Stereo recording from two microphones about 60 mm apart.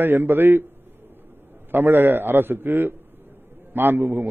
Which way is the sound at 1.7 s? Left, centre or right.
Right.